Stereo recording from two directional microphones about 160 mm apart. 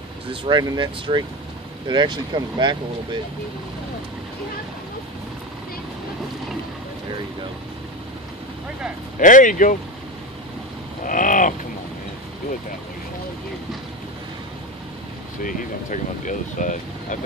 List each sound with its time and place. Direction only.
0.3 s speech: 30° right (ahead or behind)
9.2 s speech: 55° left (ahead or behind)
11.1 s speech: 55° left (ahead or behind)
15.4 s speech: 55° left (ahead or behind)